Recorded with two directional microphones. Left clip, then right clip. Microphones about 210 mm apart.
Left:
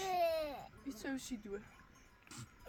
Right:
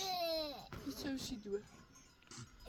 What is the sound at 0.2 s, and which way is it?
Baby cry, 10° left (ahead or behind).